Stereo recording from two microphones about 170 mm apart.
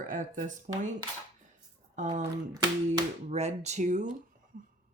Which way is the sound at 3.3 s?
40° right (ahead or behind).